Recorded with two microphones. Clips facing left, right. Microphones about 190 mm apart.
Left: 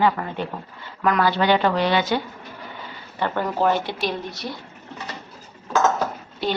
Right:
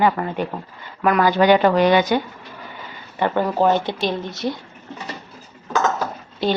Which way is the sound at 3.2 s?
15° right (ahead or behind).